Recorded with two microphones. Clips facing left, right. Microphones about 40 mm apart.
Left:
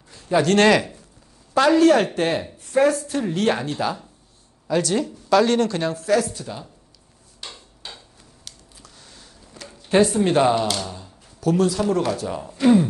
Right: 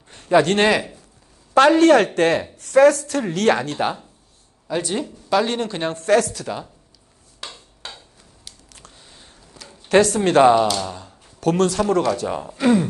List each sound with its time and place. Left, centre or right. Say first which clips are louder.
0.1 s a sound: right 3 dB; right
0.6 s speech: left 2 dB; centre
1.5 s a woman's voice: right 3 dB; right
3.7 s speech: right 2 dB; right
5.9 s speech: right 3 dB; right
8.5 s a sound: left 1 dB; centre
8.9 s a sound: even; right
9.8 s speech: right 2 dB; right
10.4 s speech: right 10 dB; right
11.3 s speech: right 1 dB; right
12.2 s speech: right 3 dB; right
12.4 s speech: left 2 dB; right